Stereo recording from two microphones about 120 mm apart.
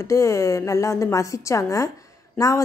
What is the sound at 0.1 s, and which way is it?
A woman's voice, 25° left (ahead or behind).